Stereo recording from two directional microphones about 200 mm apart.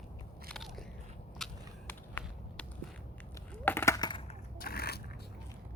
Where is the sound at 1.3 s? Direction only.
5° left (ahead or behind).